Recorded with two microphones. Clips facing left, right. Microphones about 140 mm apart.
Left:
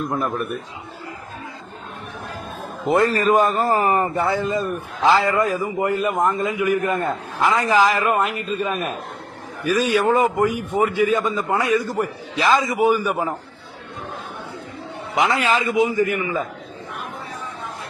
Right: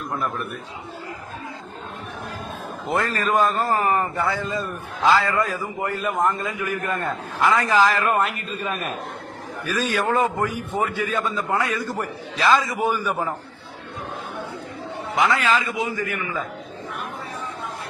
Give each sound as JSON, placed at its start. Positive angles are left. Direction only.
{"t": 2.8, "sound": "a man's voice", "side_deg": 20}
{"t": 9.6, "sound": "a man's voice", "side_deg": 10}
{"t": 15.1, "sound": "a man's voice", "side_deg": 20}